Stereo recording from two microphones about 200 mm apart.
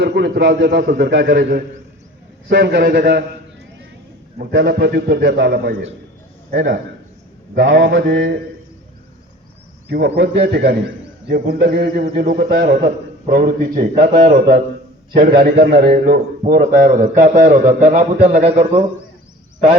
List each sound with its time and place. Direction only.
0.0 s a man's voice: 55° right (ahead or behind)
4.4 s a man's voice: 55° right (ahead or behind)
7.5 s mantra: 70° right (ahead or behind)
8.1 s a man's voice: 65° right (ahead or behind)
10.2 s a man's voice: 55° right (ahead or behind); by 18.8 s 35° right (ahead or behind)